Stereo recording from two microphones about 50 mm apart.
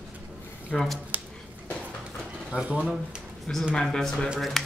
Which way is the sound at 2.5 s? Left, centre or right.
Right.